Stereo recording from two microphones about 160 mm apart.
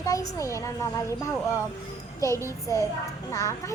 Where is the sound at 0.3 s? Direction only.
20° left (ahead or behind).